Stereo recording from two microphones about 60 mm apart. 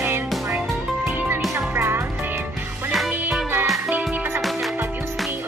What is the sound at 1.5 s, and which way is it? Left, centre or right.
Music, right.